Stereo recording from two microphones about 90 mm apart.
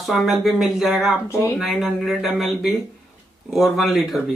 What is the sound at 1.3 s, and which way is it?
Speech, 30° left (ahead or behind).